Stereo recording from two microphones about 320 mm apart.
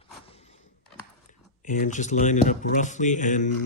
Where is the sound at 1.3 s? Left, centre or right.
Left.